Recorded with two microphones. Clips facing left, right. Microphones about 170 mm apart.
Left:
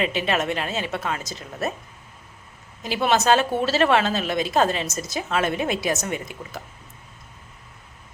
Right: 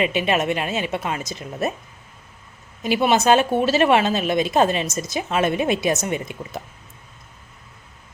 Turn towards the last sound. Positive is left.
turn(degrees=-20)  # may be behind; listen again after turning